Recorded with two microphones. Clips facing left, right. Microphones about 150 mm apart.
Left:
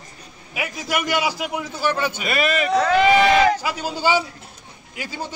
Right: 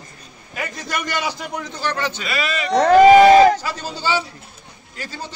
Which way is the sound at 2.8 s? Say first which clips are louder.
Right 9 dB; 40° right (ahead or behind).